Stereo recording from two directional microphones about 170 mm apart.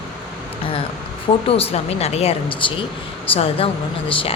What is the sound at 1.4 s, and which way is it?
A woman's voice, 35° left (ahead or behind).